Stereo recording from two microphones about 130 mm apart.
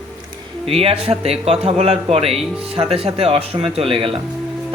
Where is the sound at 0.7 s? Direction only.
50° right (ahead or behind).